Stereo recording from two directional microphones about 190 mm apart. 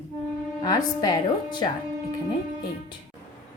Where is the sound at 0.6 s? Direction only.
20° left (ahead or behind).